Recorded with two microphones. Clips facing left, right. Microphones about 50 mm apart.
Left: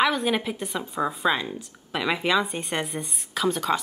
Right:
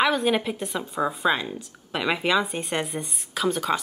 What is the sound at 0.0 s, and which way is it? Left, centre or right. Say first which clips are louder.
A woman's voice: right 1 dB; centre.